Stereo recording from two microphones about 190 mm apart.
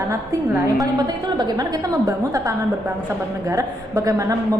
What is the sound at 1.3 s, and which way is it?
A woman's voice, 20° right (ahead or behind).